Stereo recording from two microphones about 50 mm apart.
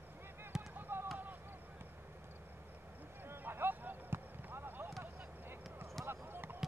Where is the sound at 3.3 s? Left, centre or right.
Right.